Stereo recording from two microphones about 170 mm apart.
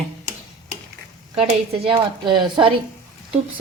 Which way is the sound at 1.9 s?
25° right (ahead or behind).